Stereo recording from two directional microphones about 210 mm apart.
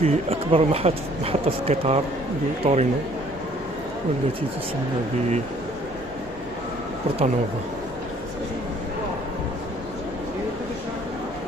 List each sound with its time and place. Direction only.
0.0 s a man's voice: 30° right (ahead or behind)